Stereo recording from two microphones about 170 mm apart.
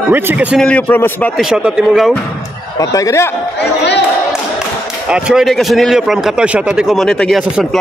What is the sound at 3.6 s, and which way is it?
Speech, 85° left.